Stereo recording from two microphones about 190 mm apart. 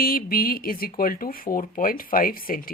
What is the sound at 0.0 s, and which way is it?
Speech, 50° left (ahead or behind).